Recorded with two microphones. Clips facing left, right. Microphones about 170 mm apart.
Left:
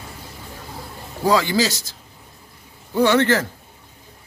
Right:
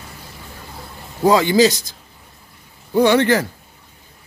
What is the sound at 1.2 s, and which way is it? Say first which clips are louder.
Speech: right 5 dB; 20° right (ahead or behind).